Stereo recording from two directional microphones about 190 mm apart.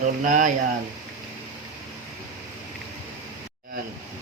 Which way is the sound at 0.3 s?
45° right (ahead or behind).